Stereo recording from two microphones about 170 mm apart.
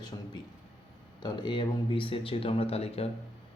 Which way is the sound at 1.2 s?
25° left (ahead or behind).